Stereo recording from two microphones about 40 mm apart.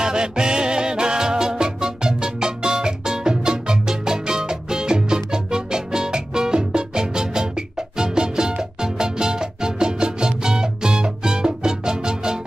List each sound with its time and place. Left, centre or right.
0.0 s music: centre